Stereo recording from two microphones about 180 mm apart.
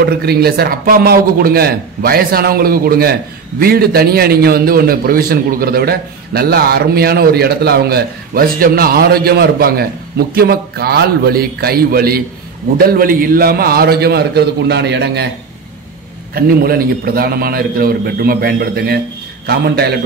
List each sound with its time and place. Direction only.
0.0 s a man's voice: 60° right (ahead or behind)
16.3 s a man's voice: 55° right (ahead or behind)